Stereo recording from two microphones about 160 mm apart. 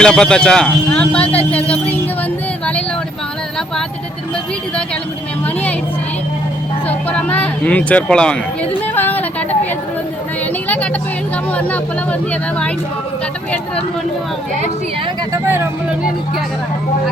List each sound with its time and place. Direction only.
0.0 s speech: 5° left (ahead or behind)
1.5 s music: 10° left (ahead or behind)
6.8 s speech: 10° left (ahead or behind)
15.3 s speech: 15° right (ahead or behind)